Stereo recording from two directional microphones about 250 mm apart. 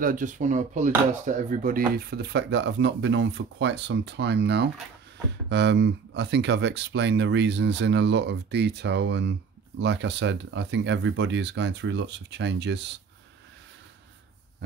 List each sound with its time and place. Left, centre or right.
0.0 s speech: right